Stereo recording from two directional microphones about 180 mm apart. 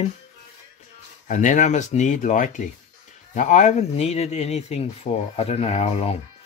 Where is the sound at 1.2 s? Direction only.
45° left (ahead or behind).